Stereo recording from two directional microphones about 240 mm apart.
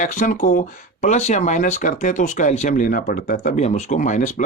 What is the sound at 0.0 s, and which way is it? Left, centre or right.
Speech, left.